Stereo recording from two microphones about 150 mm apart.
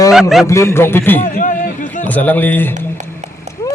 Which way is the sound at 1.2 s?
60° left (ahead or behind).